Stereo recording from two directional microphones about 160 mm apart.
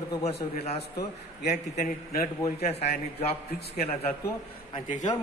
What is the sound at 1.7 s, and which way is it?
Speech, 55° left (ahead or behind).